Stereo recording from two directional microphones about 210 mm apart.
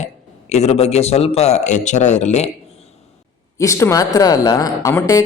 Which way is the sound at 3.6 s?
15° left (ahead or behind).